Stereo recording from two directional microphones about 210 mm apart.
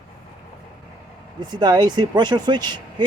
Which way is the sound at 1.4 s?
20° right (ahead or behind).